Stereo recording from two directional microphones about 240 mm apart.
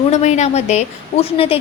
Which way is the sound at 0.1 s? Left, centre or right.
Left.